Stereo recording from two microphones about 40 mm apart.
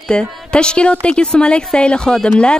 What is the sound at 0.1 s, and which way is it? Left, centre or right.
Speech, left.